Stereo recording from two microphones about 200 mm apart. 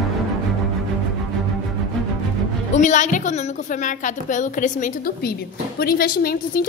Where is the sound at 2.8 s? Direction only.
40° left (ahead or behind).